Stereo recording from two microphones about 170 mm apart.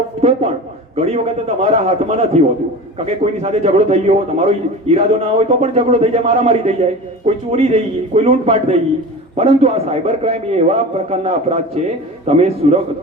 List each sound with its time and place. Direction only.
0.2 s a man's voice: 35° right (ahead or behind)